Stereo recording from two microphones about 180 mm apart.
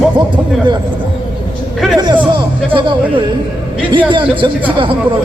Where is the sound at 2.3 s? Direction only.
25° right (ahead or behind).